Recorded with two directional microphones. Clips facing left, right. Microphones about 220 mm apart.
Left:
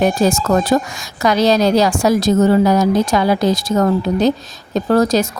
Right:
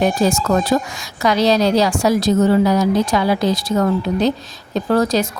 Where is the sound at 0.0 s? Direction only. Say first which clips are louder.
Left 2 dB; 45° left (ahead or behind).